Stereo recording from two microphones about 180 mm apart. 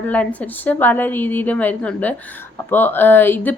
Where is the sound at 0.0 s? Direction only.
10° left (ahead or behind).